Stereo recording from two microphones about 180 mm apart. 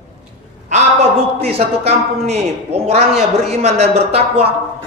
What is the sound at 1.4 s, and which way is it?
A man's voice, 35° right (ahead or behind).